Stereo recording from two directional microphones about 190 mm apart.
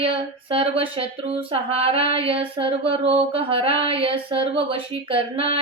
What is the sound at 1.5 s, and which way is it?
Mantra, 30° right (ahead or behind).